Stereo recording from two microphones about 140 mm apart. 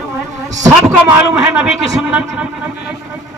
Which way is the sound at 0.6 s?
20° right (ahead or behind).